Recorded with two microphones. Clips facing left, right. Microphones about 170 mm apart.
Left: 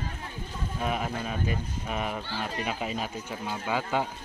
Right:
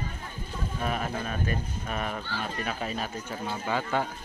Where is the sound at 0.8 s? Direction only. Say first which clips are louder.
Left 1 dB; 10° left (ahead or behind).